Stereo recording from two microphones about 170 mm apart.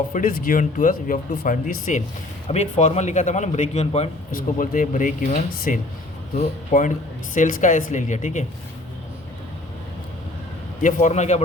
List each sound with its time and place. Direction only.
0.1 s a man's voice: 55° left (ahead or behind); by 4.1 s 40° left (ahead or behind)
4.4 s speech: 50° left (ahead or behind)
10.8 s a man's voice: 45° left (ahead or behind)